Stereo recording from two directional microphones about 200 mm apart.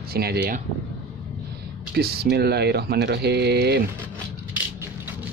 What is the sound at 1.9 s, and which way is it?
Speech, 50° right (ahead or behind).